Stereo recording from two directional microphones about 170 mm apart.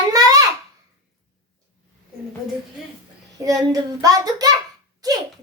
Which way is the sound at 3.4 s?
20° right (ahead or behind).